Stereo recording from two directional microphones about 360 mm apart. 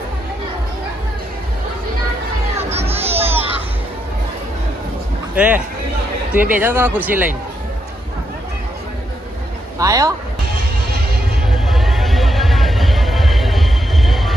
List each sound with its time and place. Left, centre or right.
2.7 s music: centre
5.3 s speech: centre
9.7 s speech: centre
11.5 s music: centre